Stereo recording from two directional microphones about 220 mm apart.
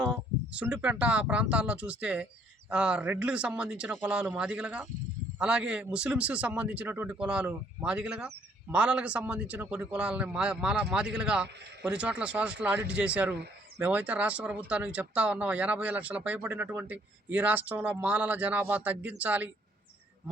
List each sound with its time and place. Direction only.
0.0 s a man's voice: 5° right (ahead or behind)